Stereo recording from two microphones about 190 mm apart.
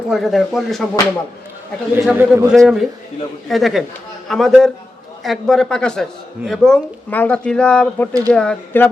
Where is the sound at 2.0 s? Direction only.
5° right (ahead or behind).